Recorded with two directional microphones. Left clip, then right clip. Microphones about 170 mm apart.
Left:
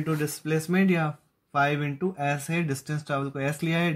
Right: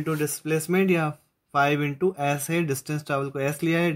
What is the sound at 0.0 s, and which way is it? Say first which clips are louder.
Speech: right 2 dB; 30° right (ahead or behind).